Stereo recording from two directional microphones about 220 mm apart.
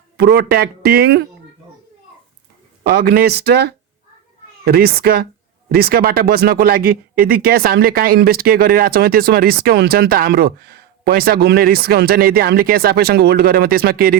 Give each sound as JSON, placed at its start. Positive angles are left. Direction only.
{"t": 0.2, "sound": "speech", "side_deg": -45}
{"t": 3.0, "sound": "speech", "side_deg": -45}
{"t": 4.6, "sound": "speech", "side_deg": -45}